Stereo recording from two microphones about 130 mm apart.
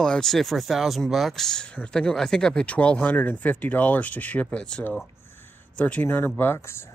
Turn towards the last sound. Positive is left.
turn(degrees=20)  # may be behind; listen again after turning